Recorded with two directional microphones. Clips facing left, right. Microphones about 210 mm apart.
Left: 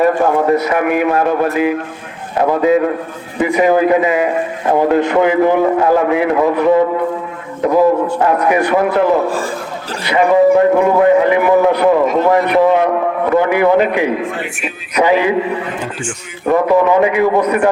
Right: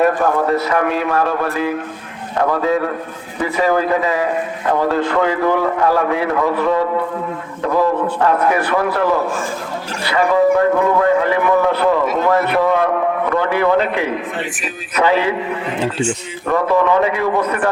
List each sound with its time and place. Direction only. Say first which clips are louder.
0.2 s speech: left 3 dB; 15° left (ahead or behind)
2.4 s a man's voice: left 5 dB; 20° left (ahead or behind)
16.5 s speech: left 4 dB; 15° left (ahead or behind)